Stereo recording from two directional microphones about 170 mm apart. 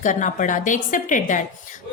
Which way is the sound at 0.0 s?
50° left (ahead or behind).